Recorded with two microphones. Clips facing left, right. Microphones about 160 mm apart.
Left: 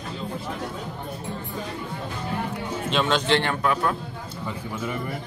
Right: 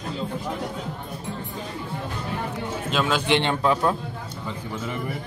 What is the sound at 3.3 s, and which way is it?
Speech, 20° right (ahead or behind).